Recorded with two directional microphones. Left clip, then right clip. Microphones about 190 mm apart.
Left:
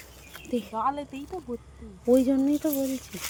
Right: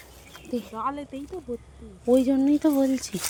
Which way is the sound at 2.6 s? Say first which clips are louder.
Right 6 dB; 35° right (ahead or behind).